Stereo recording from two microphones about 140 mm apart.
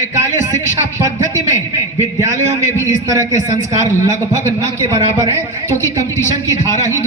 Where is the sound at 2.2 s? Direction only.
20° right (ahead or behind).